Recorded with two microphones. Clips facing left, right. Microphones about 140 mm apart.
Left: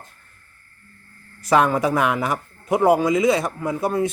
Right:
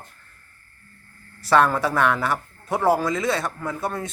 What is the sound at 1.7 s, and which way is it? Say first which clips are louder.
Speech: left 2 dB; 15° left (ahead or behind).